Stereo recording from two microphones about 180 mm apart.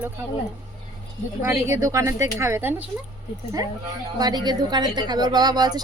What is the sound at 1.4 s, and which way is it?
Speech, 15° right (ahead or behind).